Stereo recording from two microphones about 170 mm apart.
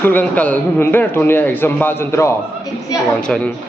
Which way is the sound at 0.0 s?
10° left (ahead or behind).